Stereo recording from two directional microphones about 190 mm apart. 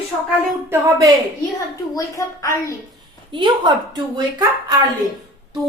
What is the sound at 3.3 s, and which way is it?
Speech, 25° right (ahead or behind).